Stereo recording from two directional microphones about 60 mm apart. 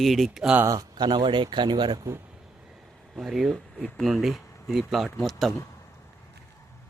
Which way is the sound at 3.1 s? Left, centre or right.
Centre.